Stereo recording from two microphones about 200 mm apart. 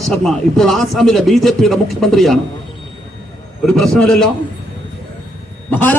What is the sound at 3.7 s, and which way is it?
Speech, 5° left (ahead or behind).